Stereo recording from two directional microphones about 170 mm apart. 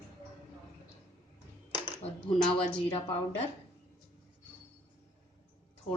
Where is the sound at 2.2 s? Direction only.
30° left (ahead or behind).